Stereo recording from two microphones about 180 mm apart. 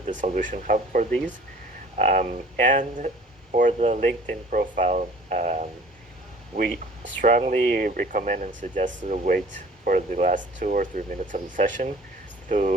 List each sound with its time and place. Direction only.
0.0 s speech: 40° right (ahead or behind)
7.2 s speech: 45° right (ahead or behind)